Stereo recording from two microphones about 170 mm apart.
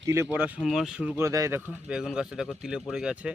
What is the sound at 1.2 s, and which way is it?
Speech, 20° right (ahead or behind).